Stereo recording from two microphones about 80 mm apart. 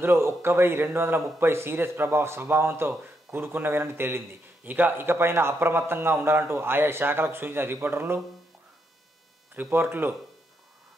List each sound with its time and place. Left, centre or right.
0.0 s speech: right
9.6 s speech: right